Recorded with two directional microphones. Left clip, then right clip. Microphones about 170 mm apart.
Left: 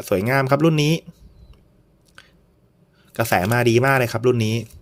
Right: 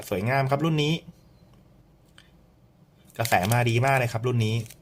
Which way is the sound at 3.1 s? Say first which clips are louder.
Left 4 dB; 35° left (ahead or behind).